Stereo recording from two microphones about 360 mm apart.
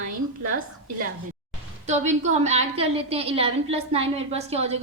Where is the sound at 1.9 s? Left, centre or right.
Centre.